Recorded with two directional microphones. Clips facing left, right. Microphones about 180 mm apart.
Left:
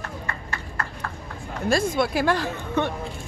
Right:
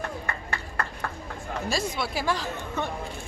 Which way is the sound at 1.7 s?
55° left (ahead or behind).